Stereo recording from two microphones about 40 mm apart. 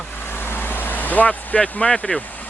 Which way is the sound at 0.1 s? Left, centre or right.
Left.